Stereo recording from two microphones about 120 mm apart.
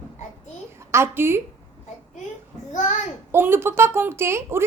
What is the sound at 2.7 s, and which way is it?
Speech, 85° left.